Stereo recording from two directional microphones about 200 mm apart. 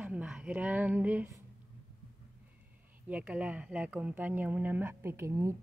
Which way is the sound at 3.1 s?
5° right (ahead or behind).